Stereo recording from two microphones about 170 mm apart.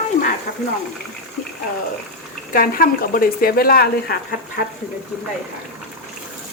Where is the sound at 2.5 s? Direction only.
60° left (ahead or behind).